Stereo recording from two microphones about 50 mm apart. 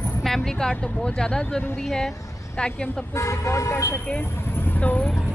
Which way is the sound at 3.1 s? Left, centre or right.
Left.